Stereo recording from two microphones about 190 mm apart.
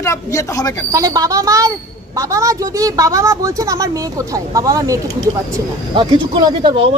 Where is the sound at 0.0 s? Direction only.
15° left (ahead or behind).